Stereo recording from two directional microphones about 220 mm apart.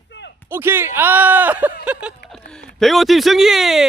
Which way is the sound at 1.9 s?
5° right (ahead or behind).